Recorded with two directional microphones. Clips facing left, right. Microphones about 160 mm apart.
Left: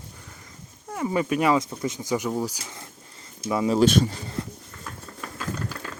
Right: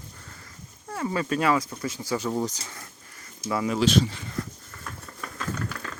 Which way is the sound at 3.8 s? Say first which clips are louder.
Left 2 dB; 50° left (ahead or behind).